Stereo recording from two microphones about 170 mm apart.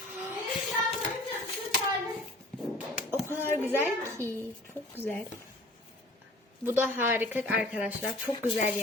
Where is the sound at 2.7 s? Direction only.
10° right (ahead or behind).